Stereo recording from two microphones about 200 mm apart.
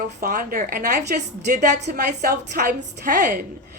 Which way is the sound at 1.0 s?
35° right (ahead or behind).